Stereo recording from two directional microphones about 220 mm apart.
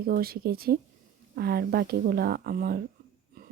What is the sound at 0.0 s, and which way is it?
A woman's voice, 45° right (ahead or behind).